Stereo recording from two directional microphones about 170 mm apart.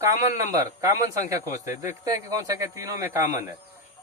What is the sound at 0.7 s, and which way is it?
Speech, 20° right (ahead or behind).